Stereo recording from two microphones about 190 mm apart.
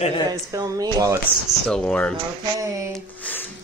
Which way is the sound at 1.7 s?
5° left (ahead or behind).